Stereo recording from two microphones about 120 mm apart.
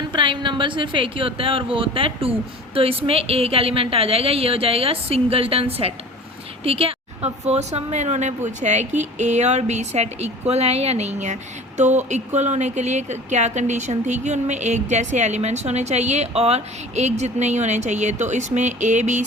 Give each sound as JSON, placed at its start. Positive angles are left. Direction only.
{"t": 0.1, "sound": "a woman's voice", "side_deg": -45}